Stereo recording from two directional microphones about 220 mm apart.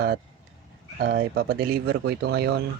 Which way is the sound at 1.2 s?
45° right (ahead or behind).